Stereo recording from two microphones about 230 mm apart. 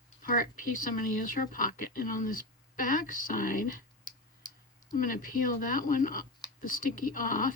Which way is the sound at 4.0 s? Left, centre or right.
Centre.